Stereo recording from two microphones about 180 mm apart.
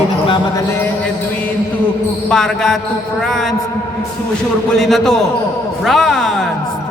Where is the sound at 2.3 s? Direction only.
Centre (ahead or behind).